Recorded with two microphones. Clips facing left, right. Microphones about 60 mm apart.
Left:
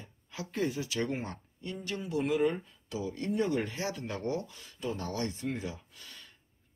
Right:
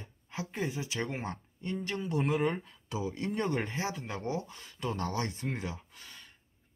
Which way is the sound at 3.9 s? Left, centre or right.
Centre.